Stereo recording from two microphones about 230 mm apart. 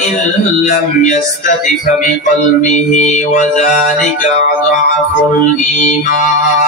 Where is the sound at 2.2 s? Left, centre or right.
Left.